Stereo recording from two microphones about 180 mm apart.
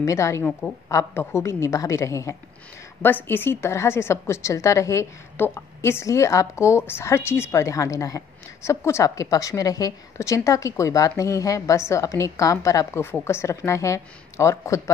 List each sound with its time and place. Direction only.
0.0 s a woman's voice: 15° left (ahead or behind)
0.5 s a woman's voice: 5° left (ahead or behind)
0.8 s a woman's voice: 15° left (ahead or behind)